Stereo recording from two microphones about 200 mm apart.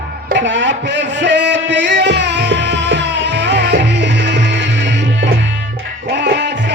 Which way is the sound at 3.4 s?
60° right (ahead or behind).